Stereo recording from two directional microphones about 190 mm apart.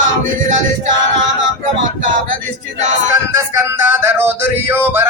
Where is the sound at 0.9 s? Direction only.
80° right.